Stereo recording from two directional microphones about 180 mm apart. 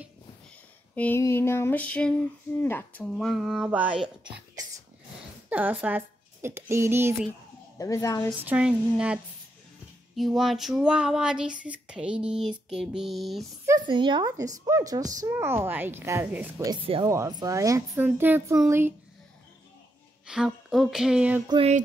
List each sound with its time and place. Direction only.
0.9 s female singing: 10° left (ahead or behind)
2.6 s speech: 10° left (ahead or behind); by 4.1 s 5° right (ahead or behind)
5.5 s speech: 10° right (ahead or behind)
7.8 s female singing: 20° left (ahead or behind)
8.3 s a woman's voice: 10° right (ahead or behind)
13.8 s a woman's voice: 25° right (ahead or behind)
20.2 s speech: centre (ahead or behind)
21.5 s music: 30° right (ahead or behind)